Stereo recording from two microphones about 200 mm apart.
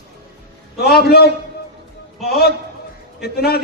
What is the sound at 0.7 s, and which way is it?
Speech, 50° left (ahead or behind).